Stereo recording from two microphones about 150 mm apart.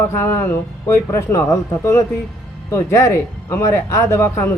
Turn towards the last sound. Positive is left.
turn(degrees=20)  # may be behind; listen again after turning